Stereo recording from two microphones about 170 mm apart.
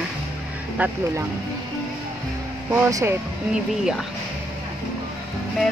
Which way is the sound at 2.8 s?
20° right (ahead or behind).